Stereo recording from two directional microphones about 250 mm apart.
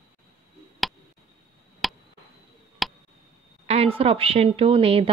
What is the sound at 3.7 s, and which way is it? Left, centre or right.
A woman's voice, right.